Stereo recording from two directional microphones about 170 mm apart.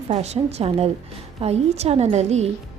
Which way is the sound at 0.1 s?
40° right (ahead or behind).